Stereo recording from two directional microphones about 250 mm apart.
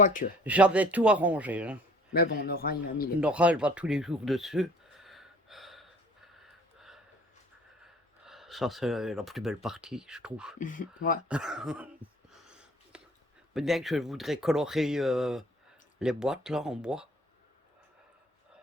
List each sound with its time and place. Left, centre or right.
0.0 s a man's voice: left
0.4 s speech: centre
2.1 s a man's voice: left
3.2 s speech: centre
8.2 s speech: centre
10.6 s a man's voice: left
11.3 s speech: centre
12.3 s a sound: centre
13.5 s speech: centre